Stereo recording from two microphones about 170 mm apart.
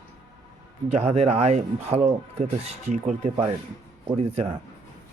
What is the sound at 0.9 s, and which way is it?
Speech, 40° right (ahead or behind).